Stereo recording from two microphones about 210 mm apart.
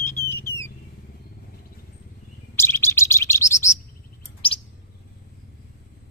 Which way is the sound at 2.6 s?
10° left (ahead or behind).